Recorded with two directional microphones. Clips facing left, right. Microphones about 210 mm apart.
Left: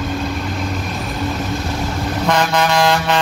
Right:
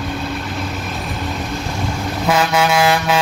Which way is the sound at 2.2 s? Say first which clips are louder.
Right 1 dB; 5° right (ahead or behind).